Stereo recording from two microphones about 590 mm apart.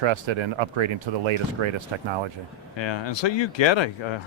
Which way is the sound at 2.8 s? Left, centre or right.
Left.